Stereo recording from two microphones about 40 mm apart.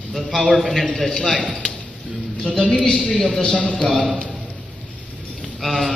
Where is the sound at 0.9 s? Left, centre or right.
Centre.